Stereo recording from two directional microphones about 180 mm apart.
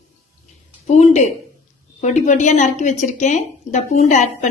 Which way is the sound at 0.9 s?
40° left (ahead or behind).